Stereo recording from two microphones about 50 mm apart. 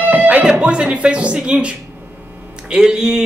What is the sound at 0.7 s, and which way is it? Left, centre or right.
Speech, right.